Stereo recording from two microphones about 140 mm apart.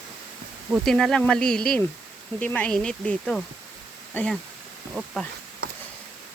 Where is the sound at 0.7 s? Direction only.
Centre (ahead or behind).